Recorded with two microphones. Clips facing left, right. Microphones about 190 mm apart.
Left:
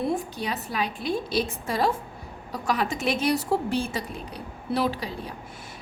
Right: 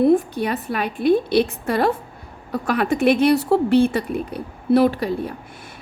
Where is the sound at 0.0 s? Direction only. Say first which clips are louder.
Right 11 dB; 55° right (ahead or behind).